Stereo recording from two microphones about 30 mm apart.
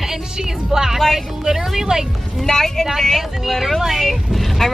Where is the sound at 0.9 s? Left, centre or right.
Centre.